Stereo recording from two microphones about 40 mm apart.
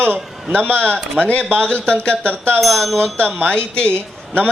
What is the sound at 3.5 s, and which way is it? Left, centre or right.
Speech, left.